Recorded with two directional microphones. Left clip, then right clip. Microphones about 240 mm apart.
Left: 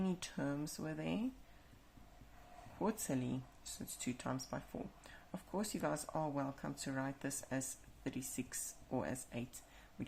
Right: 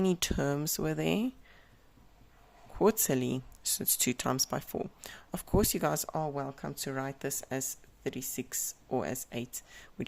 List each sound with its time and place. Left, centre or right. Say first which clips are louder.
0.0 s speech: right 12 dB; right
2.7 s speech: right 13 dB; right